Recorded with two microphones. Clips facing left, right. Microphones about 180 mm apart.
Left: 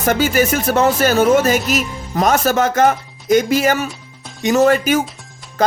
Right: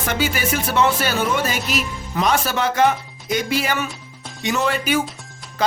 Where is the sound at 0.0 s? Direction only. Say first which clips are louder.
Left 7 dB; 45° left (ahead or behind).